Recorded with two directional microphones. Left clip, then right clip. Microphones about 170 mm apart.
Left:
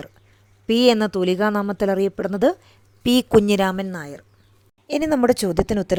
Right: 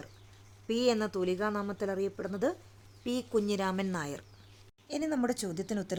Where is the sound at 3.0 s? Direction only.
65° left (ahead or behind).